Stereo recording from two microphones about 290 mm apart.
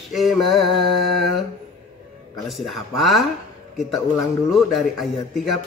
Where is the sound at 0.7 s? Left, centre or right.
Left.